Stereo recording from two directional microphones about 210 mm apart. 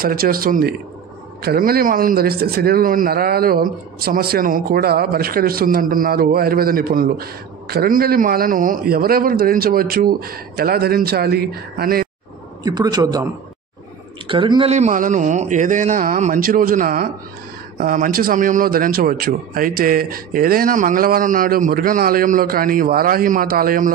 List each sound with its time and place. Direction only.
0.0 s speech: 45° right (ahead or behind)
12.6 s a man's voice: 20° right (ahead or behind); by 23.9 s 45° right (ahead or behind)